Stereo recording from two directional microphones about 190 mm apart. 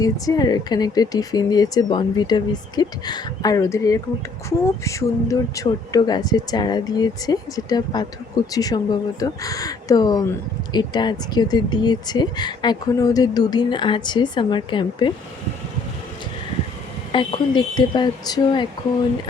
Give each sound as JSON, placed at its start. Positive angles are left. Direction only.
{"t": 0.0, "sound": "speech", "side_deg": 20}
{"t": 17.1, "sound": "speech", "side_deg": 25}